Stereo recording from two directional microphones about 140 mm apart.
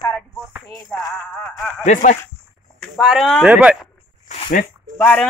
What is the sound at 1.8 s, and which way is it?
Speech, 60° left (ahead or behind).